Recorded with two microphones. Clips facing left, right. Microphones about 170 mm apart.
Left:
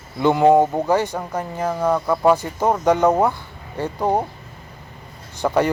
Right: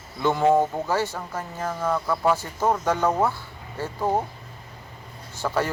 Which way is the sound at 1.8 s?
35° left (ahead or behind).